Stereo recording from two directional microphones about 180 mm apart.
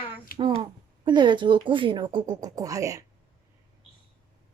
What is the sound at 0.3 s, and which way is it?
Speech, 30° right (ahead or behind).